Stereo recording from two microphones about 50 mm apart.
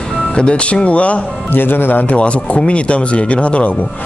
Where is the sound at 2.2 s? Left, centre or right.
Left.